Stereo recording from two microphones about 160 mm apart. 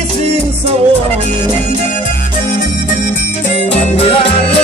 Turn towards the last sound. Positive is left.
turn(degrees=40)  # may be behind; listen again after turning